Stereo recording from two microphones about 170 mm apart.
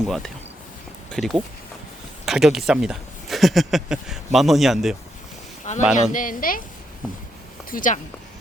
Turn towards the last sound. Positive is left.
turn(degrees=50)  # may be behind; listen again after turning